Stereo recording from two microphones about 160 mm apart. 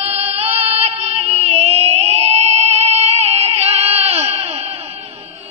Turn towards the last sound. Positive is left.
turn(degrees=-40)  # may be behind; listen again after turning